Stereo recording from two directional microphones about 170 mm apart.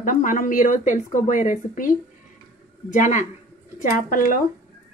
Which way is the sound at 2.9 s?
45° left (ahead or behind).